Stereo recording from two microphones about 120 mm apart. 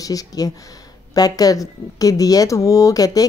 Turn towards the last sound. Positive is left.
turn(degrees=30)  # may be behind; listen again after turning